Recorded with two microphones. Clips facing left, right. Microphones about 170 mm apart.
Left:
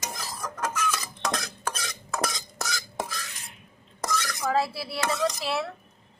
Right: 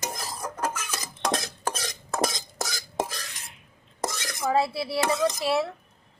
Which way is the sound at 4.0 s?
25° right (ahead or behind).